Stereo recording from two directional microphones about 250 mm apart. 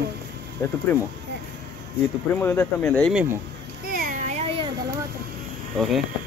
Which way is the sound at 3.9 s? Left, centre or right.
Right.